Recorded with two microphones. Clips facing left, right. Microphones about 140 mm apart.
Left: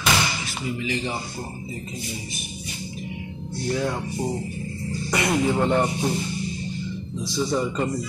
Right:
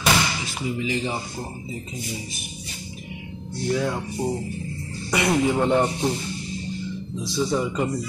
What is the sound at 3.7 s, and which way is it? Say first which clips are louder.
Speech: right 1 dB; 5° left (ahead or behind).